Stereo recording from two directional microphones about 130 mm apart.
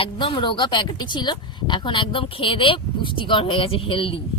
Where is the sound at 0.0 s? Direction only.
40° left (ahead or behind).